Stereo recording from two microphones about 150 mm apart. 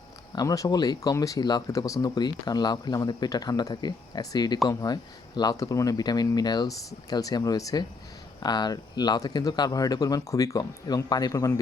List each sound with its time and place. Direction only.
0.3 s speech: 25° left (ahead or behind)